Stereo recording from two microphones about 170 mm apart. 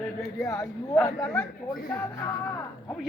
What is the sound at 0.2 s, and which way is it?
Speech, 20° left (ahead or behind).